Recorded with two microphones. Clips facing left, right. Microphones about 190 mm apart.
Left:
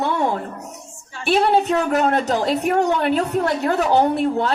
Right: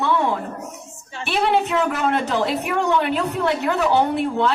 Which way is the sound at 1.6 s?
40° left (ahead or behind).